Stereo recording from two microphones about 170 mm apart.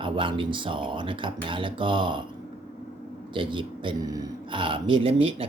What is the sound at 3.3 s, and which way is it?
Speech, 30° right (ahead or behind).